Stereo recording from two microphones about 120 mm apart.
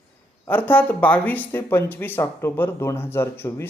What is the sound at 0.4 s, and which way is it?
Speech, 15° left (ahead or behind).